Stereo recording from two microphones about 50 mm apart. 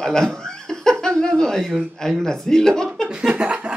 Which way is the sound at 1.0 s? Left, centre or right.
Centre.